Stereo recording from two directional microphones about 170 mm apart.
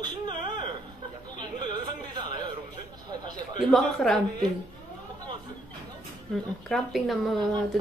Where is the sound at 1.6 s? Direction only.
25° right (ahead or behind).